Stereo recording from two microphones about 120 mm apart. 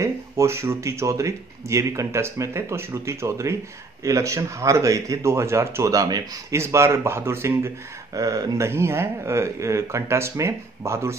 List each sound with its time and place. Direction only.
0.0 s speech: 25° right (ahead or behind)